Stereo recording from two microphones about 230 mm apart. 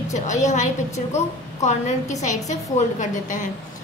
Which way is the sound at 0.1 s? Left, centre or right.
Left.